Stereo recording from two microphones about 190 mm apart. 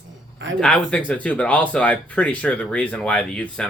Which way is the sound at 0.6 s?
5° left (ahead or behind).